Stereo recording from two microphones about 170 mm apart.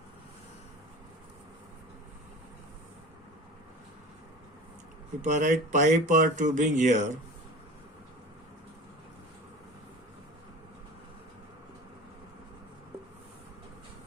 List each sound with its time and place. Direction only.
5.2 s speech: 45° right (ahead or behind)